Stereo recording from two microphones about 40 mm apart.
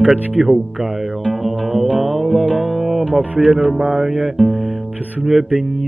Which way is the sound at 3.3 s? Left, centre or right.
Right.